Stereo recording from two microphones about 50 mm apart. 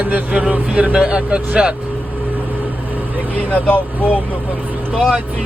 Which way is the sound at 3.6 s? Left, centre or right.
Left.